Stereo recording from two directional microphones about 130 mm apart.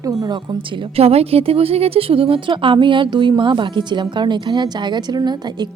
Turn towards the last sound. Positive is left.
turn(degrees=-30)  # may be behind; listen again after turning